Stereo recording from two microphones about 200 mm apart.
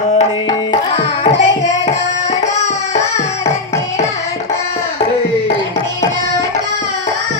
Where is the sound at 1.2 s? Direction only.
35° left (ahead or behind).